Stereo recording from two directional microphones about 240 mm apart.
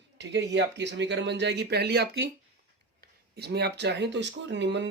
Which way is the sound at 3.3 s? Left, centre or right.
Right.